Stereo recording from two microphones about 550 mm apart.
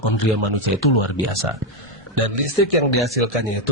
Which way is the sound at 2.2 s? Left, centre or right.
Right.